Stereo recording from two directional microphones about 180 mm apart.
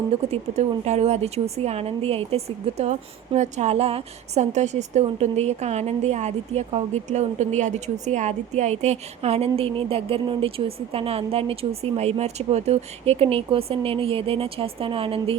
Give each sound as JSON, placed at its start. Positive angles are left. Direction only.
{"t": 0.3, "sound": "a woman's voice", "side_deg": -35}